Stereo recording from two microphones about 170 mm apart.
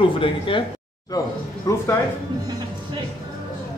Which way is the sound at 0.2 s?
30° left (ahead or behind).